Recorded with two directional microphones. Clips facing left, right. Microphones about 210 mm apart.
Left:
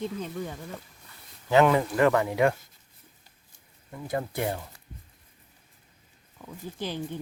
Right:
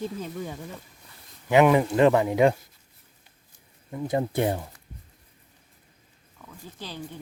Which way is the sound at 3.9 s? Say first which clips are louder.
Right 5 dB; 20° right (ahead or behind).